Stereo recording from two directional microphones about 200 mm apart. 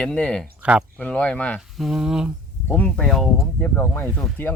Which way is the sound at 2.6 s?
10° left (ahead or behind).